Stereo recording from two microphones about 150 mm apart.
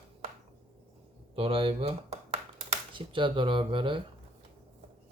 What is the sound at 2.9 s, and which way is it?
Speech, 35° right (ahead or behind).